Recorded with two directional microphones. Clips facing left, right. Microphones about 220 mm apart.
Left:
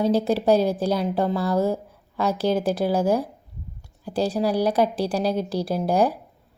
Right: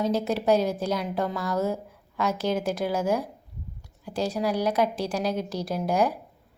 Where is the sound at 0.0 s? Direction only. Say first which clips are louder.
Left 5 dB; 35° left (ahead or behind).